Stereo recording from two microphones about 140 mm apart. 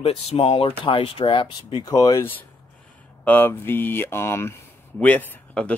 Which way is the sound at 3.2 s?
15° left (ahead or behind).